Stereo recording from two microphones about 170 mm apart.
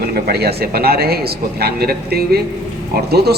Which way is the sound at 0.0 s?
65° right (ahead or behind).